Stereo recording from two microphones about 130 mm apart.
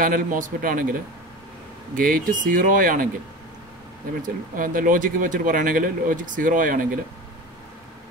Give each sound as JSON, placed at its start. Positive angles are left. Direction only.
{"t": 0.0, "sound": "speech", "side_deg": -90}
{"t": 2.0, "sound": "speech", "side_deg": -90}
{"t": 4.2, "sound": "speech", "side_deg": -90}